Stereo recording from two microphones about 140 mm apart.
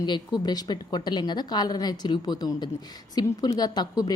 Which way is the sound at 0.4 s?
30° left (ahead or behind).